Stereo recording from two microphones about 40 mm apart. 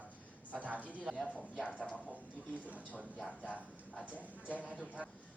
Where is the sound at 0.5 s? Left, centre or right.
Right.